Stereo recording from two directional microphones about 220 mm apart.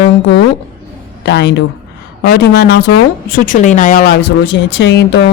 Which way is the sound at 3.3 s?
35° left (ahead or behind).